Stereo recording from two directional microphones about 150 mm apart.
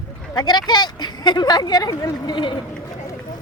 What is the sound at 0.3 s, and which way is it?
Speech, 30° left (ahead or behind).